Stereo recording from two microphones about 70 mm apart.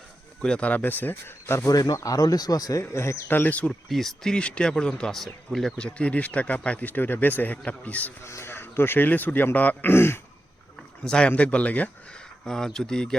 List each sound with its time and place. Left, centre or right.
0.4 s a man's voice: centre; by 1.7 s left
1.7 s speech: left
2.9 s speech: left
3.2 s a man's voice: left
3.7 s speech: centre
5.7 s a man's voice: centre
8.2 s speech: left
11.0 s a man's voice: centre
12.5 s speech: centre